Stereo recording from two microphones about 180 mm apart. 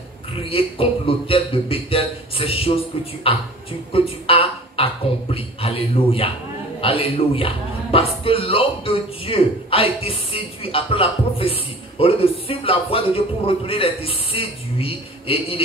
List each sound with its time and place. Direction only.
0.4 s a man's voice: 30° left (ahead or behind)